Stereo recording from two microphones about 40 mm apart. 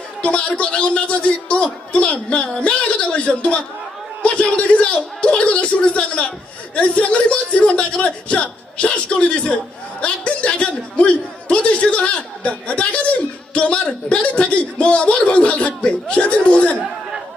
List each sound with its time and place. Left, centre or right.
0.2 s a man's voice: left